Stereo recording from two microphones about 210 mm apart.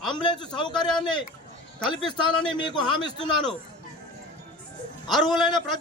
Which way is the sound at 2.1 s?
20° left (ahead or behind).